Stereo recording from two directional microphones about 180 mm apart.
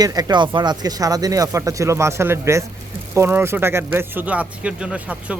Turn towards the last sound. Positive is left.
turn(degrees=-5)  # may be behind; listen again after turning